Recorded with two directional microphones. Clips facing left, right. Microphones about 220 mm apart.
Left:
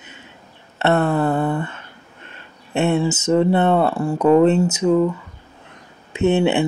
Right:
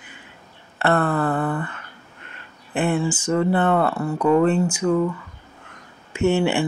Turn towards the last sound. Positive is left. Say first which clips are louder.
# left 3 dB
turn(degrees=20)  # may be behind; listen again after turning